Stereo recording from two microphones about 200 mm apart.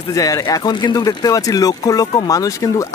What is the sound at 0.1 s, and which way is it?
Speech, 15° left (ahead or behind).